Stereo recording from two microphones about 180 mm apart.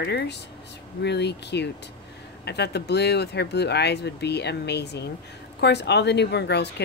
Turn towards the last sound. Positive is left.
turn(degrees=70)  # may be behind; listen again after turning